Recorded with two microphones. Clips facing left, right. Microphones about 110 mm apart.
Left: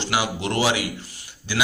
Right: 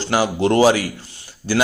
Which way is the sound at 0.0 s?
40° right (ahead or behind).